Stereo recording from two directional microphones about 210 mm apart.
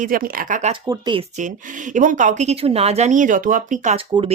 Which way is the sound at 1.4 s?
40° right (ahead or behind).